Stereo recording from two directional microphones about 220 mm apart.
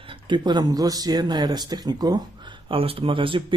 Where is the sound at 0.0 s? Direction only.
20° right (ahead or behind).